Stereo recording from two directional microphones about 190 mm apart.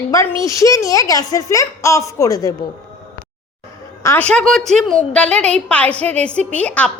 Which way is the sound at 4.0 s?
10° left (ahead or behind).